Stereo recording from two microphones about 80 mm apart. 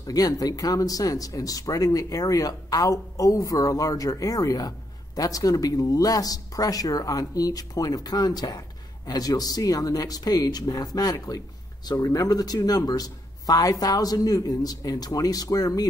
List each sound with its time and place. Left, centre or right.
0.0 s speech: left